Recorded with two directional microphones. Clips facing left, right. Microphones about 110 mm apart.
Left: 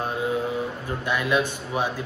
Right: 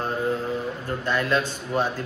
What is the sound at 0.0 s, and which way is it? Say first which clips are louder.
Mantra: right 1 dB; 10° left (ahead or behind).